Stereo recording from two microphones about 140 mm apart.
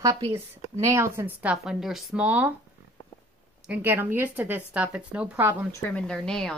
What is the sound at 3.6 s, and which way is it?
Speech, 15° right (ahead or behind).